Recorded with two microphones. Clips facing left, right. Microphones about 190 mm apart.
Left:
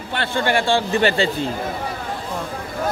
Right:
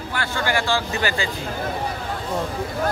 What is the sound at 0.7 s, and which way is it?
Speech, 30° left (ahead or behind).